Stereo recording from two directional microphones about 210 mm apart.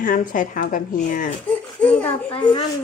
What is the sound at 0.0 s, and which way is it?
Speech, 40° left (ahead or behind).